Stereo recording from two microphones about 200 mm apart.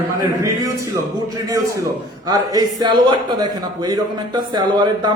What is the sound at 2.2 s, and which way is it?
A man's voice, 20° right (ahead or behind).